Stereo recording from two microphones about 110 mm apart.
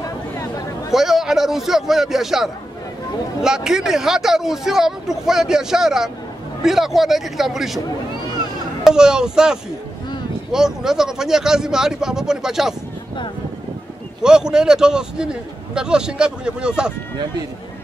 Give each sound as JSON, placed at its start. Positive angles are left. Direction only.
{"t": 0.4, "sound": "a sound", "side_deg": 30}
{"t": 0.9, "sound": "speech", "side_deg": -5}
{"t": 8.8, "sound": "a man's voice", "side_deg": -5}
{"t": 14.2, "sound": "a man's voice", "side_deg": -5}